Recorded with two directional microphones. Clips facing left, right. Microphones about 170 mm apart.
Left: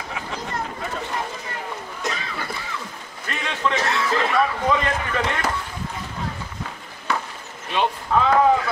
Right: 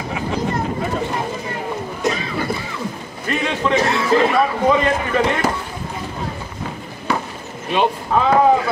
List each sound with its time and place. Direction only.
0.1 s vehicle: 15° right (ahead or behind)
2.0 s a sound: 20° right (ahead or behind)
7.7 s speech: 15° right (ahead or behind)